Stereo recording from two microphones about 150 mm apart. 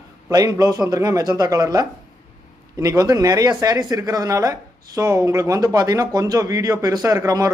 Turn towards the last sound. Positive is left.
turn(degrees=-25)  # may be behind; listen again after turning